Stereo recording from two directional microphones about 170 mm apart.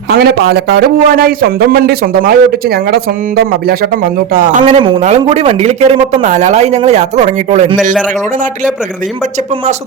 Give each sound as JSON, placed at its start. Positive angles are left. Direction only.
{"t": 0.1, "sound": "a man's voice", "side_deg": -70}
{"t": 4.6, "sound": "speech", "side_deg": -30}